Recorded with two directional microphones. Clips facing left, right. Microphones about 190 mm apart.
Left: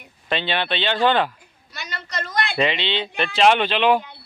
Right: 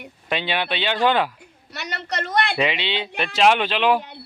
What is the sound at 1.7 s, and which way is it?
Speech, 70° right (ahead or behind).